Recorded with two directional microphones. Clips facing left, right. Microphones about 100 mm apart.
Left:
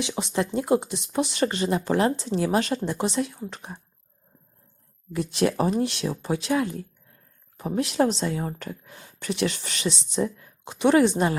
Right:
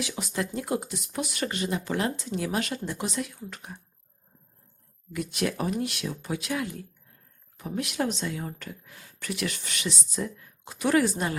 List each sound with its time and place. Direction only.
0.0 s speech: 25° left (ahead or behind)
5.1 s speech: 30° left (ahead or behind)